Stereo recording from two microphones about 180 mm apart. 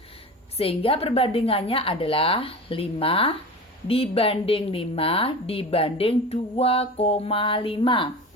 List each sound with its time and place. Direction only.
0.5 s a woman's voice: 30° left (ahead or behind)